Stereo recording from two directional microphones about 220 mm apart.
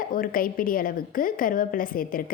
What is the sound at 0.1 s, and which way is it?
A woman's voice, 40° left (ahead or behind).